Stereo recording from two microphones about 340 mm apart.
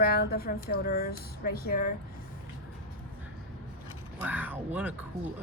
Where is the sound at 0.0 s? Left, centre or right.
Left.